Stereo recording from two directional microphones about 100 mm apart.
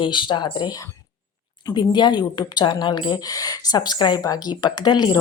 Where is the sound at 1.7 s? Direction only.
50° left (ahead or behind).